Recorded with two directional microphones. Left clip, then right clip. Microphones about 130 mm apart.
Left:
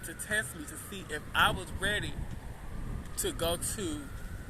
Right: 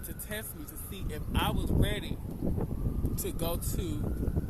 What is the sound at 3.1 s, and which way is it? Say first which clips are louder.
Speech: left 5 dB; 25° right (ahead or behind).